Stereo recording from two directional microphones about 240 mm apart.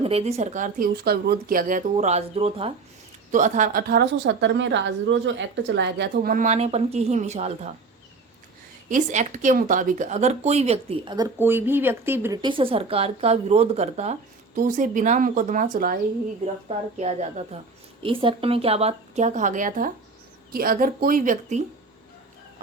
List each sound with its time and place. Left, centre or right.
0.0 s a woman's voice: right
8.9 s a woman's voice: right